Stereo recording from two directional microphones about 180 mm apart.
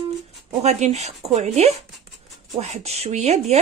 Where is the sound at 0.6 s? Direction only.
40° right (ahead or behind).